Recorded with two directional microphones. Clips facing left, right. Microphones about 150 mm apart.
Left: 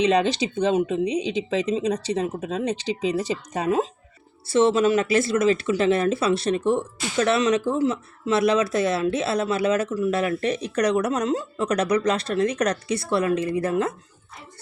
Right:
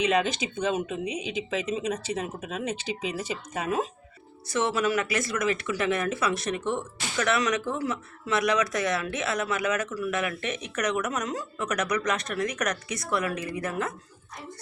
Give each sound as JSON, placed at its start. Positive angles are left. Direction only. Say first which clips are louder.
{"t": 0.0, "sound": "speech", "louder": "left 5 dB", "side_deg": 35}